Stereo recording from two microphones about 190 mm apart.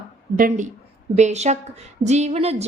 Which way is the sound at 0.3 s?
45° right (ahead or behind).